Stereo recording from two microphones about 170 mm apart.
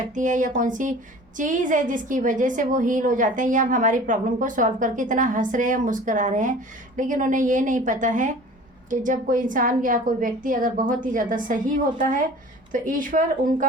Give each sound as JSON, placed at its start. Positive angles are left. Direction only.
{"t": 0.1, "sound": "a woman's voice", "side_deg": -50}